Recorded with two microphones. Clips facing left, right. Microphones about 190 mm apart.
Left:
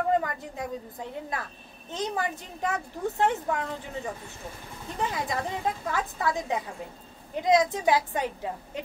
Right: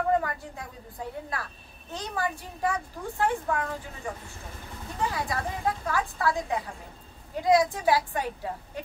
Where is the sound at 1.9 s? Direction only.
20° left (ahead or behind).